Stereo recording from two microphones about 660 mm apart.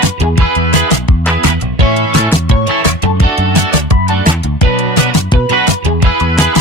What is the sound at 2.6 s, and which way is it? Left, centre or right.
Music, left.